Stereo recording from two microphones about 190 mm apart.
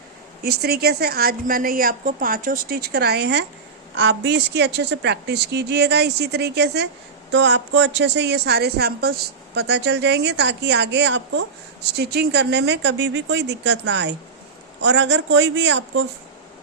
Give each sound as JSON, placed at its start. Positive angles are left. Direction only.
{"t": 0.4, "sound": "a woman's voice", "side_deg": -55}